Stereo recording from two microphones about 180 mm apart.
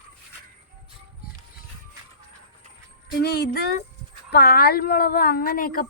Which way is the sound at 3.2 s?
65° left (ahead or behind).